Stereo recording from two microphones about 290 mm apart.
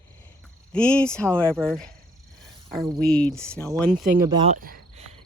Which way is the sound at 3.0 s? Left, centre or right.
Centre.